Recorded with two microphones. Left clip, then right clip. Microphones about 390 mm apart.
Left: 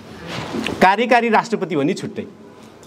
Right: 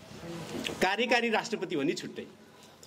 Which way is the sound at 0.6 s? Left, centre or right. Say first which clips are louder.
Left 14 dB; left.